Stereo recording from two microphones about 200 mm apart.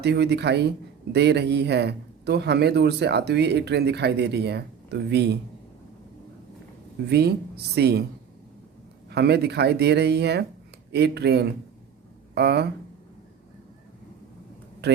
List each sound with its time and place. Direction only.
0.0 s a man's voice: 55° right (ahead or behind)
7.1 s a man's voice: 55° right (ahead or behind)
9.0 s a man's voice: 55° right (ahead or behind)